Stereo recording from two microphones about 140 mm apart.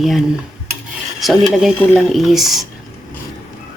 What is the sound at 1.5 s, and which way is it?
Speech, centre (ahead or behind).